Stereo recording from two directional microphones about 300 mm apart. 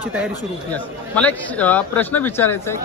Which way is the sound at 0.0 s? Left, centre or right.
Centre.